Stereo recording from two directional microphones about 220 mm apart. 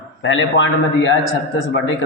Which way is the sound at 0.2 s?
55° left (ahead or behind).